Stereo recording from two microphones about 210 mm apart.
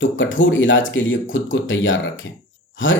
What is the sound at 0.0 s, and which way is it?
Speech, 65° left (ahead or behind).